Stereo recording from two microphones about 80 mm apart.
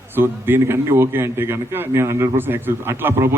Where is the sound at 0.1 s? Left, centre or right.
Right.